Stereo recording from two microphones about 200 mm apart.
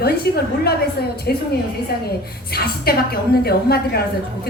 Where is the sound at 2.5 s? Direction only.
50° left (ahead or behind).